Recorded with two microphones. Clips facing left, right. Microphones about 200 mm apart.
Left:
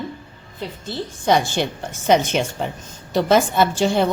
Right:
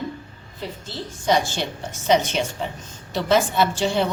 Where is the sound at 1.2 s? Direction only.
55° left (ahead or behind).